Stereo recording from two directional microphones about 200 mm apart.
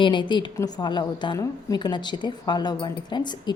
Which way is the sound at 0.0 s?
25° left (ahead or behind).